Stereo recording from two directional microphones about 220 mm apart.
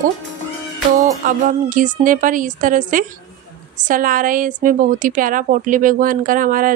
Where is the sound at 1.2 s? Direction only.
35° right (ahead or behind).